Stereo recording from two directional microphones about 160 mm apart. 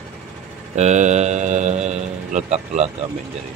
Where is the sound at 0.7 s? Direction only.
45° right (ahead or behind).